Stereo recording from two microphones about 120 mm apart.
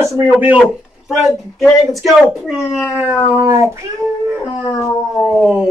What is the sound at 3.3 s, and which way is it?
Speech, 25° right (ahead or behind).